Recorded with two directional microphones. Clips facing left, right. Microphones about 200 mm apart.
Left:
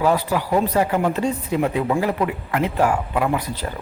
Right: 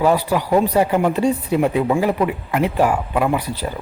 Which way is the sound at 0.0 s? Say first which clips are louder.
Right 3 dB; 10° right (ahead or behind).